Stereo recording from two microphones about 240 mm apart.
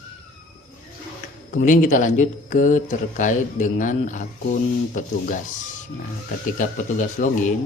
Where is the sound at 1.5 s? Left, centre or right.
Left.